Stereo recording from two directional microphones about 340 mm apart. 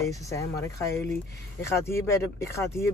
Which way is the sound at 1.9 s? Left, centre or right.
Centre.